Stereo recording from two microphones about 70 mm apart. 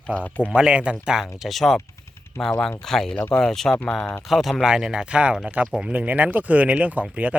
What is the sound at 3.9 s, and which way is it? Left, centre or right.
Speech, left.